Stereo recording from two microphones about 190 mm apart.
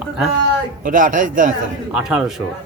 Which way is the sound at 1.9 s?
5° right (ahead or behind).